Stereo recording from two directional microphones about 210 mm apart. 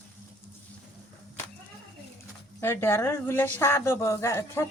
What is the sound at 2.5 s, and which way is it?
A woman's voice, 10° left (ahead or behind).